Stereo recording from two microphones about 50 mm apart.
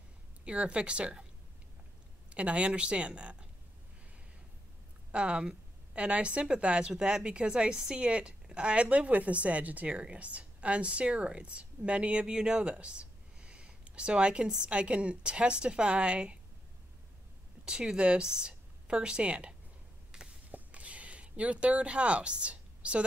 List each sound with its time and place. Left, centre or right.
0.5 s a woman's voice: right
2.2 s speech: right
5.1 s a woman's voice: right
17.6 s speech: centre
20.1 s walk: centre
20.5 s a sound: right